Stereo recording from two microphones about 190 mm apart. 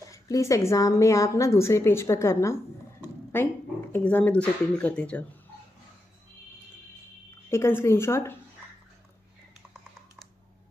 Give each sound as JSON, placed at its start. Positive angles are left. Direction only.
{"t": 0.0, "sound": "a woman's voice", "side_deg": 15}
{"t": 7.4, "sound": "a woman's voice", "side_deg": 15}